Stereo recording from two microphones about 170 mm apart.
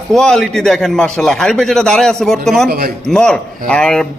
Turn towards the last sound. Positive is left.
turn(degrees=5)  # may be behind; listen again after turning